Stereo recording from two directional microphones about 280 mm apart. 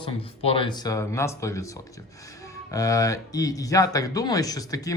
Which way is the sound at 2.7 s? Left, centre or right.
Centre.